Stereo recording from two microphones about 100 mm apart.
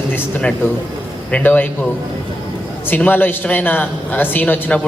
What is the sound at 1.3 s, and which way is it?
Speech, 20° left (ahead or behind).